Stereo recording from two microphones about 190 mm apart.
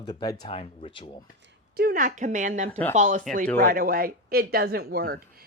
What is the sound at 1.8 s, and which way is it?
Speech, 45° right (ahead or behind).